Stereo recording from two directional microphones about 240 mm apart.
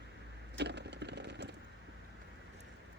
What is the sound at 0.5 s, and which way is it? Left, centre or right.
Crack, right.